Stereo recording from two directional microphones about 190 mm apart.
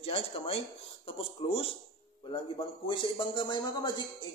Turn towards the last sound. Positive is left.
turn(degrees=25)  # may be behind; listen again after turning